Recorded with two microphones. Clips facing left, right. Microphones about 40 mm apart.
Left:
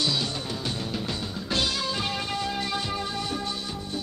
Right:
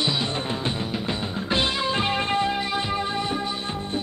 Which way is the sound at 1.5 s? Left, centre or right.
Right.